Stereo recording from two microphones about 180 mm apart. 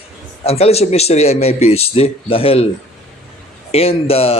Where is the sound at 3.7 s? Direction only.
35° left (ahead or behind).